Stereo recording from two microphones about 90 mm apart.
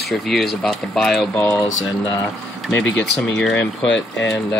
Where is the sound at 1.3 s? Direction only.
20° left (ahead or behind).